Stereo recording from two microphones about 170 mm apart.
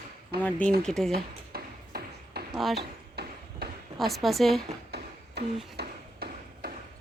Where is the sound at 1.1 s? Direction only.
65° right (ahead or behind).